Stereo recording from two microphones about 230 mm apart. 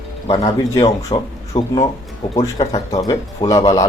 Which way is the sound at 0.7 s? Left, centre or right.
Centre.